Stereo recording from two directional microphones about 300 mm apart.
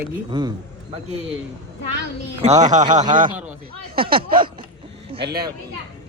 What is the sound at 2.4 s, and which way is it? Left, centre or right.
Speech, centre.